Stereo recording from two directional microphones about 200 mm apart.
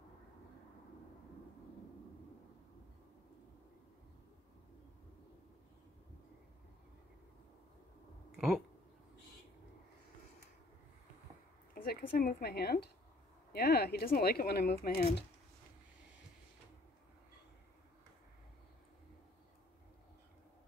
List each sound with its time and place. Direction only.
8.4 s speech: centre (ahead or behind)
11.7 s speech: 50° left (ahead or behind)